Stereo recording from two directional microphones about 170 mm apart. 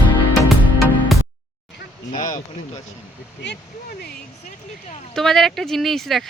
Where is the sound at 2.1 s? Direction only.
45° left (ahead or behind).